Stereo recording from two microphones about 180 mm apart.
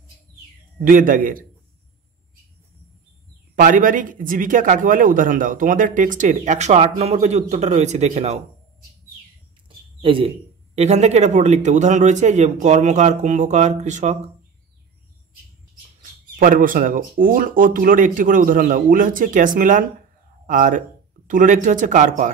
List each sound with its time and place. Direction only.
0.8 s speech: 50° right (ahead or behind)
3.5 s speech: 50° right (ahead or behind)
10.0 s speech: 30° right (ahead or behind)
16.0 s speech: 50° right (ahead or behind)